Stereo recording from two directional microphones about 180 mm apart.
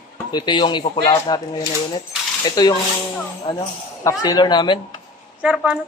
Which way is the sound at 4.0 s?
20° left (ahead or behind).